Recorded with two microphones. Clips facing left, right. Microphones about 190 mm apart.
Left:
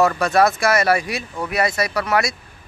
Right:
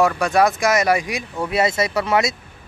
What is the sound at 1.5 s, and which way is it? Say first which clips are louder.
Speech: right 2 dB; 25° right (ahead or behind).